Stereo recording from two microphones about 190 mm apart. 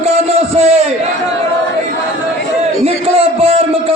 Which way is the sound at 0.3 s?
30° right (ahead or behind).